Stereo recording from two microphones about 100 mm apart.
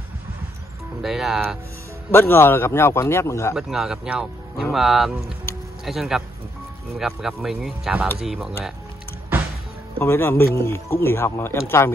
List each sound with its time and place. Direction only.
1.0 s speech: 5° right (ahead or behind)
2.0 s speech: 25° left (ahead or behind)
3.5 s speech: 5° right (ahead or behind)
9.9 s speech: 25° left (ahead or behind)